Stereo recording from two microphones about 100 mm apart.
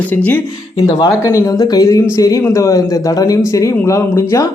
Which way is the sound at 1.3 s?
40° left (ahead or behind).